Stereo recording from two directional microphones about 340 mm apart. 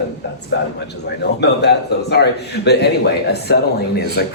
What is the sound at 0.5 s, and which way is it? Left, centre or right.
Speech, left.